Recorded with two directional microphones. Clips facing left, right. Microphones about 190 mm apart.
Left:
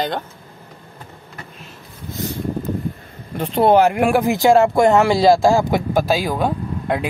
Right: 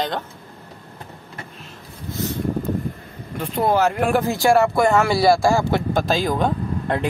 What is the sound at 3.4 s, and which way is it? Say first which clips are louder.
Speech: left 5 dB; 30° left (ahead or behind).